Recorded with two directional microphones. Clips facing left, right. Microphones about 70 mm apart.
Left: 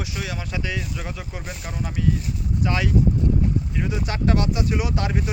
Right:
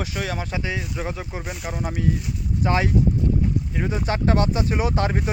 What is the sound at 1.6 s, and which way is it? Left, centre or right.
Speech, right.